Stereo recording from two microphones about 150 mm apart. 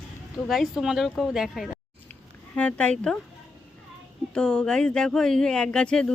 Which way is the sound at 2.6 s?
10° left (ahead or behind).